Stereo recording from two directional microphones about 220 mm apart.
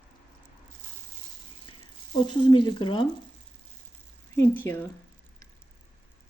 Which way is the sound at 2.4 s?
20° left (ahead or behind).